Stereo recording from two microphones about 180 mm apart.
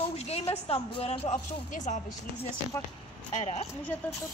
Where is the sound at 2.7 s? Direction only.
15° left (ahead or behind).